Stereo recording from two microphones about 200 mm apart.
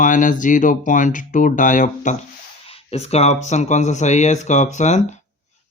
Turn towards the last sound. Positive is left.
turn(degrees=35)  # may be behind; listen again after turning